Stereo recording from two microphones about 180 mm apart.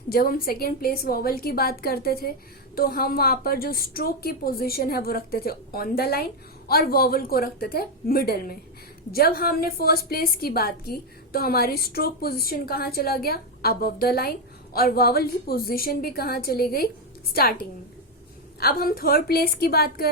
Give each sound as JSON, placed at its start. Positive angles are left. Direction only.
{"t": 0.1, "sound": "a woman's voice", "side_deg": 55}
{"t": 18.6, "sound": "a woman's voice", "side_deg": 55}